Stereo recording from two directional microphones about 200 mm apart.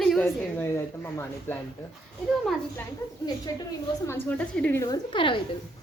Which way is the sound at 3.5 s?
20° left (ahead or behind).